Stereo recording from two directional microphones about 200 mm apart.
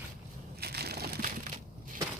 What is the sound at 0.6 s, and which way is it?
Crushing, 50° right (ahead or behind).